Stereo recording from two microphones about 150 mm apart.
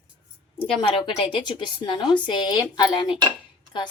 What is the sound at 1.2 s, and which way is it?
Speech, 35° left (ahead or behind).